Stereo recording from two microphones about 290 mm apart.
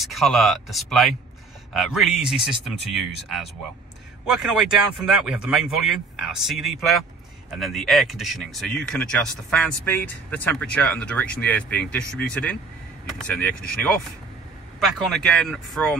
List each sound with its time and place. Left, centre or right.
0.0 s speech: centre